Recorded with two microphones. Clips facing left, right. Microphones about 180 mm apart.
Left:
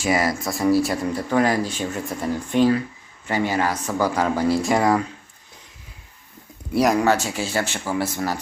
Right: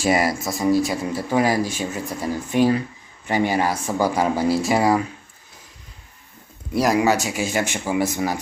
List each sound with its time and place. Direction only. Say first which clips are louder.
0.1 s speech: even; 20° right (ahead or behind)
0.4 s speech: even; centre (ahead or behind)
1.3 s speech: right 1 dB; 10° right (ahead or behind)
6.7 s speech: even; 5° right (ahead or behind)